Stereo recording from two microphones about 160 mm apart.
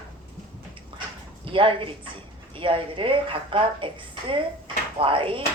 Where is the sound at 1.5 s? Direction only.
35° right (ahead or behind).